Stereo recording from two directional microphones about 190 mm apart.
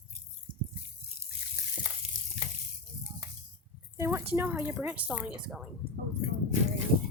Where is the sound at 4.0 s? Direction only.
15° right (ahead or behind).